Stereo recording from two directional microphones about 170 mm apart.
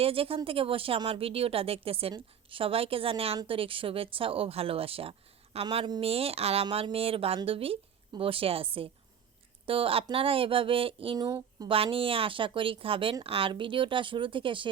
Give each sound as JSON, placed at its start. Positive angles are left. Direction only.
{"t": 0.0, "sound": "speech", "side_deg": -35}